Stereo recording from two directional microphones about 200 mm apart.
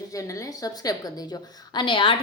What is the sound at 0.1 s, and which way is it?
A woman's voice, 15° left (ahead or behind).